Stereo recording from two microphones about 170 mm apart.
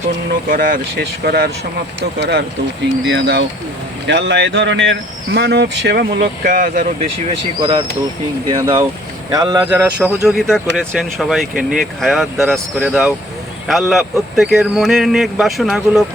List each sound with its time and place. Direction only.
0.4 s speech: 55° right (ahead or behind)
2.1 s speech: 80° right; by 7.1 s 55° right (ahead or behind)
7.6 s speech: 30° right (ahead or behind); by 16.0 s centre (ahead or behind)